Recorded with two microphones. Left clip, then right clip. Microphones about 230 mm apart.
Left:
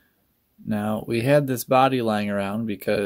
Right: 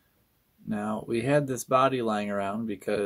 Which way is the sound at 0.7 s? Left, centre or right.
Left.